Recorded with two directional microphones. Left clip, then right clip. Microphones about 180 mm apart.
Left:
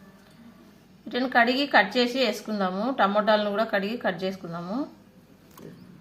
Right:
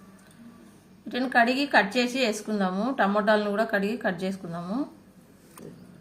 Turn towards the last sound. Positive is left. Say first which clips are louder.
# left 1 dB
turn(degrees=-15)  # may be behind; listen again after turning